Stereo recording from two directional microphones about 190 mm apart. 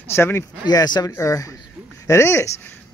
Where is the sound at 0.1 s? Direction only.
15° left (ahead or behind).